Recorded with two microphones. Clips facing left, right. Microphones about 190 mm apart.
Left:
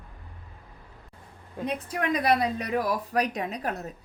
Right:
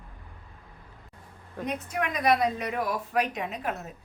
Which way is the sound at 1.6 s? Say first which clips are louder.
Left 2 dB; 35° left (ahead or behind).